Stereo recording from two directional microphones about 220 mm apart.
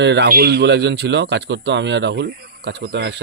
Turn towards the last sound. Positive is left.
turn(degrees=-50)  # may be behind; listen again after turning